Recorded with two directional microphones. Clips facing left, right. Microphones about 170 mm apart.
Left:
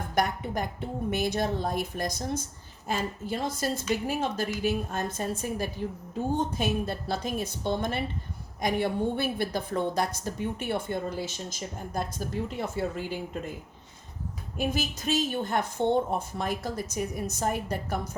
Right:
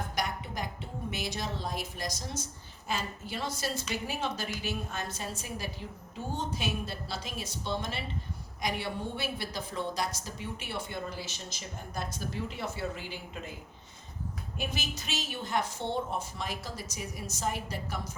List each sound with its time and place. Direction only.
0.2 s a woman's voice: 55° left (ahead or behind)
12.5 s a woman's voice: 50° left (ahead or behind)
14.7 s a woman's voice: 50° left (ahead or behind)